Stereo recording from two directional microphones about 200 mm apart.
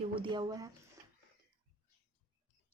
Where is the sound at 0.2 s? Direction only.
20° right (ahead or behind).